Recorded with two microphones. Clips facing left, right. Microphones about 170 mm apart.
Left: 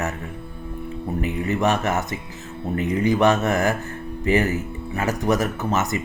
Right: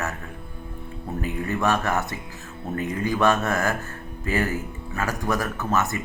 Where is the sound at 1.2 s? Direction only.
20° left (ahead or behind).